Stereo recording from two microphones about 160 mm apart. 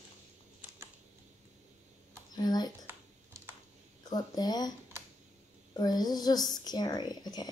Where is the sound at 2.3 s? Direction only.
25° left (ahead or behind).